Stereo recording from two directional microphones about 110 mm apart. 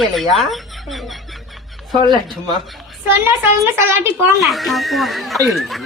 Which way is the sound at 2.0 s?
45° right (ahead or behind).